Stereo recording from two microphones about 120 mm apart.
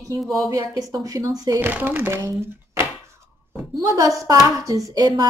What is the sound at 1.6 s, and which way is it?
Speech, 15° right (ahead or behind).